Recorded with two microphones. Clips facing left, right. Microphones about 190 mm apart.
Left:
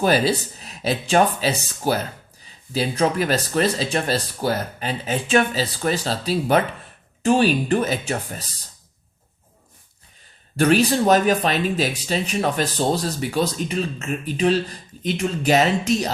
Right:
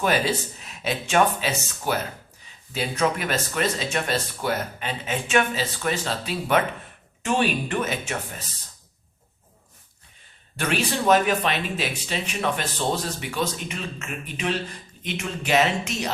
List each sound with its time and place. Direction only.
0.0 s speech: 35° left (ahead or behind)
10.6 s speech: 40° left (ahead or behind)